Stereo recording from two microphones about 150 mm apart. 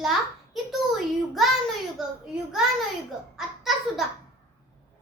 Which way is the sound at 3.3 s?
Centre (ahead or behind).